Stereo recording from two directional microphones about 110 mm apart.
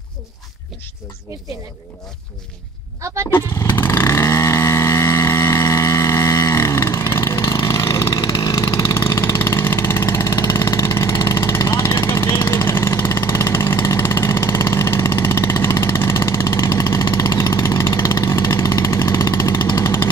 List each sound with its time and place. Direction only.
3.3 s vehicle: 20° left (ahead or behind)